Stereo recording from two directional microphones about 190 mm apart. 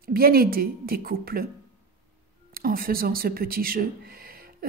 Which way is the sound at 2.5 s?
50° right (ahead or behind).